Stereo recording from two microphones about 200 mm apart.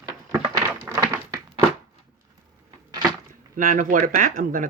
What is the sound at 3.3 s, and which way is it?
Speech, 45° right (ahead or behind).